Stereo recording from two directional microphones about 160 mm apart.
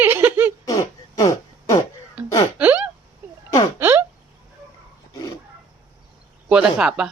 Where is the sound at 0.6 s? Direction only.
20° left (ahead or behind).